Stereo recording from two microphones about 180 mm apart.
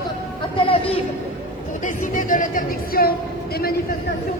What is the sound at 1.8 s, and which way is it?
Speech, 45° left (ahead or behind).